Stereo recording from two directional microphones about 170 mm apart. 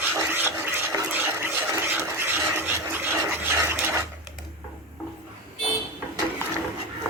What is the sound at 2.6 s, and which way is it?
Stir, 10° right (ahead or behind).